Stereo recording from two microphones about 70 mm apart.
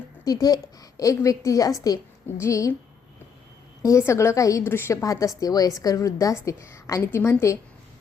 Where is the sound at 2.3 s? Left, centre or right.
Left.